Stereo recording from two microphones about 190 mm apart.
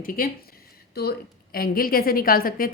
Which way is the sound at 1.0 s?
55° left (ahead or behind).